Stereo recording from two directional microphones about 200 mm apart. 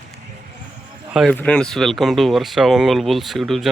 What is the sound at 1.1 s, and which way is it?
Speech, centre (ahead or behind).